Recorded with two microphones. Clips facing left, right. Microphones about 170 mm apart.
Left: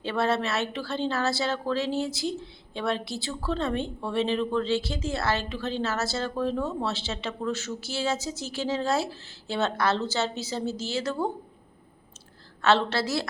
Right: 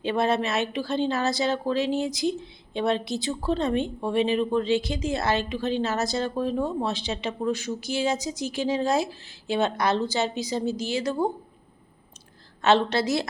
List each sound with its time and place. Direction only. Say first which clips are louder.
0.0 s a woman's voice: right 2 dB; 15° right (ahead or behind)
12.6 s a woman's voice: right 2 dB; 15° right (ahead or behind)